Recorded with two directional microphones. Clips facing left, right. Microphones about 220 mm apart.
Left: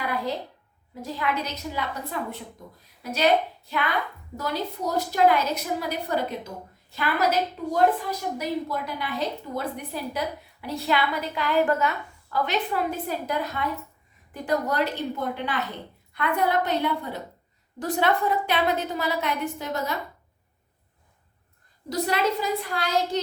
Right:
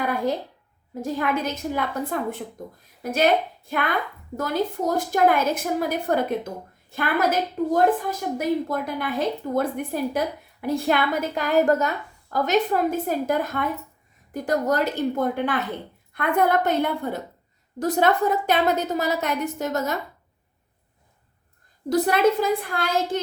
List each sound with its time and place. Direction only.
0.0 s a sound: 50° right (ahead or behind)
1.0 s a woman's voice: 50° right (ahead or behind)
21.8 s a woman's voice: 50° right (ahead or behind)